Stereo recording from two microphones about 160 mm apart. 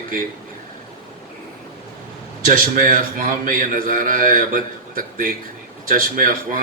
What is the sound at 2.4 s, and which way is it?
A man's voice, 60° right (ahead or behind).